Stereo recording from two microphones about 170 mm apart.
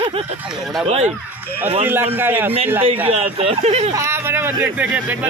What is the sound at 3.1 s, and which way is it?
Speech, 35° right (ahead or behind).